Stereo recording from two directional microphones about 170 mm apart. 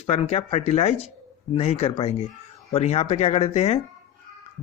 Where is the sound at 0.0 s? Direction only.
35° left (ahead or behind).